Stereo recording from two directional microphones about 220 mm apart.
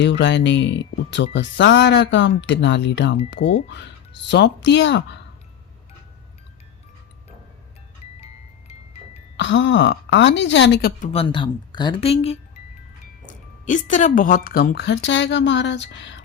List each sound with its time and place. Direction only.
0.0 s speech: 55° left (ahead or behind)
8.2 s music: 25° left (ahead or behind)
9.4 s speech: 55° left (ahead or behind)
11.1 s speech: 25° left (ahead or behind); by 16.2 s 55° left (ahead or behind)